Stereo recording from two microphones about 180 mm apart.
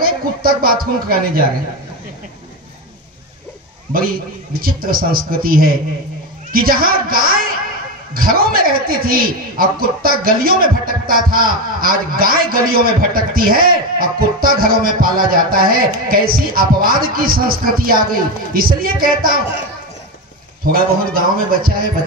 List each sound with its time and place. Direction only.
0.0 s speech: 55° right (ahead or behind)
4.6 s a man's voice: 55° right (ahead or behind)
20.7 s a man's voice: 55° right (ahead or behind)